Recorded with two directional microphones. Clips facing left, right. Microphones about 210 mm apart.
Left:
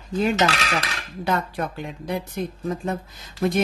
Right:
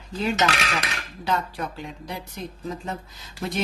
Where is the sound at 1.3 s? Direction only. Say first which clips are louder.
Left 2 dB; 55° left (ahead or behind).